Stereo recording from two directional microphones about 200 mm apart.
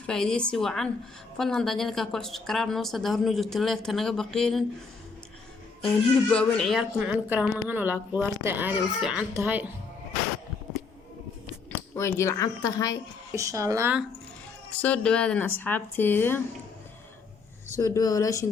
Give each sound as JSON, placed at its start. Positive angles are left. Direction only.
{"t": 0.0, "sound": "speech", "side_deg": 5}
{"t": 5.8, "sound": "a woman's voice", "side_deg": 5}
{"t": 11.7, "sound": "speech", "side_deg": 15}
{"t": 13.3, "sound": "a woman's voice", "side_deg": -15}
{"t": 14.8, "sound": "speech", "side_deg": 5}
{"t": 17.7, "sound": "speech", "side_deg": 15}